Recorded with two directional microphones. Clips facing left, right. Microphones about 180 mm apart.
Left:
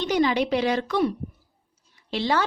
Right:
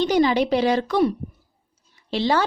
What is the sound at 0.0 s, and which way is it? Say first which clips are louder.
A woman's voice: right 4 dB; 35° right (ahead or behind).